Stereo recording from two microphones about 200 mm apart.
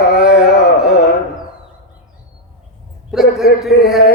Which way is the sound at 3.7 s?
50° left (ahead or behind).